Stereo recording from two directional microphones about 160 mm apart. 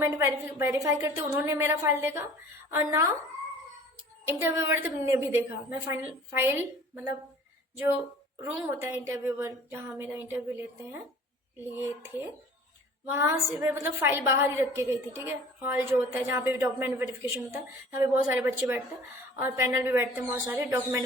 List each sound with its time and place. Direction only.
0.0 s a woman's voice: 15° right (ahead or behind)
4.3 s a woman's voice: 15° right (ahead or behind)
8.4 s a woman's voice: 15° right (ahead or behind)
13.1 s a woman's voice: 15° right (ahead or behind)